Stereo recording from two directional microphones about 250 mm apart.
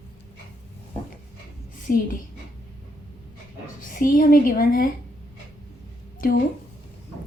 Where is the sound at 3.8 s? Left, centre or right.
Left.